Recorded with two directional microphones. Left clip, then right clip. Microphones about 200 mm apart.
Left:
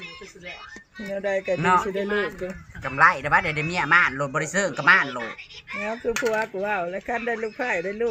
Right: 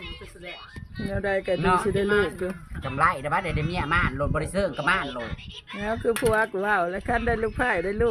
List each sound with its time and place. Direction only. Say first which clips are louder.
0.9 s speech: left 1 dB; 20° right (ahead or behind)
1.5 s speech: left 4 dB; centre (ahead or behind)
2.0 s speech: right 3 dB; 45° right (ahead or behind)
2.8 s speech: left 5 dB; 5° left (ahead or behind)
5.8 s speech: right 1 dB; 25° right (ahead or behind)